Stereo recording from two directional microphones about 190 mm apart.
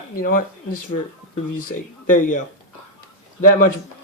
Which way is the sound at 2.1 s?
45° left (ahead or behind).